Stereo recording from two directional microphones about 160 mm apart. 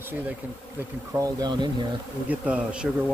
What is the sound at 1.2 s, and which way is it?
Speech, 25° right (ahead or behind).